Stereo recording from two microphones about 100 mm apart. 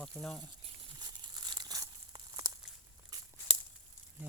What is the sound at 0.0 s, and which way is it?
Speech, 10° left (ahead or behind).